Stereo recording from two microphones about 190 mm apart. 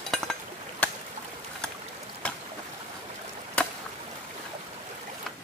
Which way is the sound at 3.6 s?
5° left (ahead or behind).